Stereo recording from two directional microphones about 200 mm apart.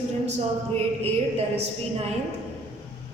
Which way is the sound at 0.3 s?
30° right (ahead or behind).